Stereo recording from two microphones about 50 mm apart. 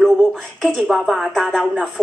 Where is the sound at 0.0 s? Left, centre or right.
Centre.